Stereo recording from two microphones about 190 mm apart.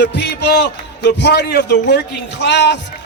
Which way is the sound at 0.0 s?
60° left (ahead or behind).